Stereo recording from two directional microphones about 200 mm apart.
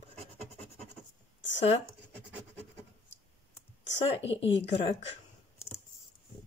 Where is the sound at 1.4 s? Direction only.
65° left (ahead or behind).